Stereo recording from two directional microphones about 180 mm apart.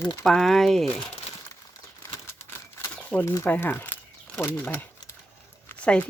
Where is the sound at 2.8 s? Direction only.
15° left (ahead or behind).